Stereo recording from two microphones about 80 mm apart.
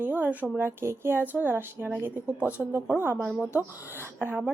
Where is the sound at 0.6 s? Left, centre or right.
Right.